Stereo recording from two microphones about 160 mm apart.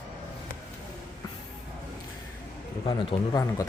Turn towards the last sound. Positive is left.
turn(degrees=20)  # may be behind; listen again after turning